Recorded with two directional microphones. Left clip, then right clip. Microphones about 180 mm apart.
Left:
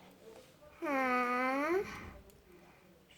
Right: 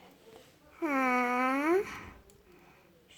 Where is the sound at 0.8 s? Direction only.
40° right (ahead or behind).